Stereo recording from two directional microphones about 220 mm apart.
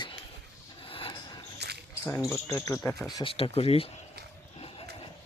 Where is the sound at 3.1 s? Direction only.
25° left (ahead or behind).